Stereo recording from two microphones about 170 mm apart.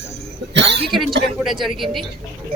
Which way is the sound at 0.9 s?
Centre (ahead or behind).